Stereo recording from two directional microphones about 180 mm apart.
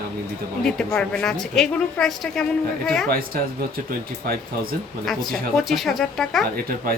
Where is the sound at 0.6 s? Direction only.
5° left (ahead or behind).